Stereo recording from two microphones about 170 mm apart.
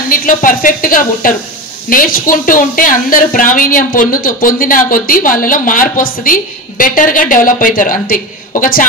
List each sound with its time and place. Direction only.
0.1 s a woman's voice: 55° left (ahead or behind)